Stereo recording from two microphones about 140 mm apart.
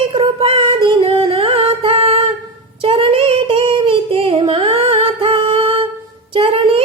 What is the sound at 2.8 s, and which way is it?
Singing, 40° right (ahead or behind).